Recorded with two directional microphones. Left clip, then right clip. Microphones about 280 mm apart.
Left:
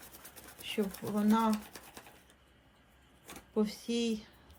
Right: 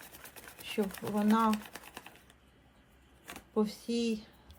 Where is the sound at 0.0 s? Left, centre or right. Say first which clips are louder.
Right 3 dB; centre.